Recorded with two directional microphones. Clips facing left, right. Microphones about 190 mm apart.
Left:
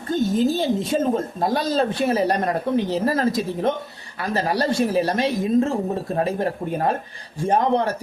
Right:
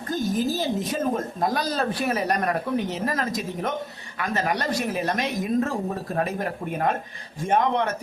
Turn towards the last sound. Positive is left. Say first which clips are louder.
# left 3 dB
turn(degrees=35)  # may be behind; listen again after turning